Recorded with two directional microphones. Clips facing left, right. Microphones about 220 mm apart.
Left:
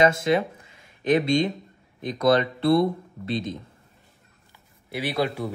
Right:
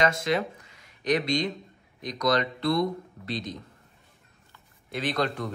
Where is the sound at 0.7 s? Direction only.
25° left (ahead or behind).